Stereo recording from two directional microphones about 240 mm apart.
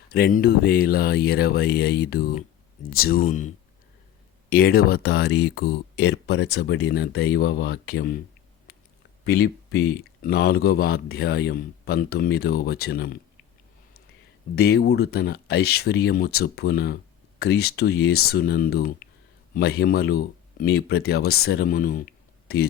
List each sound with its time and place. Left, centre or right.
0.1 s speech: left
9.2 s speech: left
14.5 s speech: left